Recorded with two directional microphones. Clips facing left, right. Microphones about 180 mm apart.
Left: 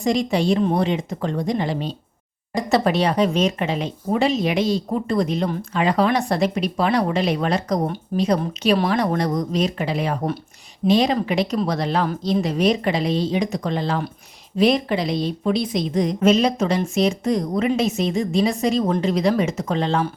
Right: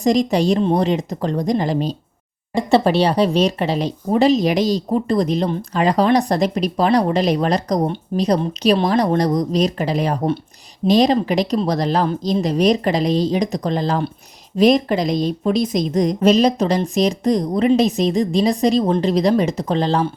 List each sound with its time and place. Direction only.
0.0 s speech: 40° right (ahead or behind)
2.6 s speech: 30° right (ahead or behind)